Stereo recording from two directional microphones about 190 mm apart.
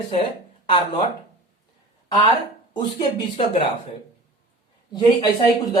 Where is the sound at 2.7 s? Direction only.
25° left (ahead or behind).